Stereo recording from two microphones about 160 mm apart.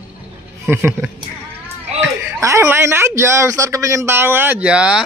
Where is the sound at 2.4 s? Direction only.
15° right (ahead or behind).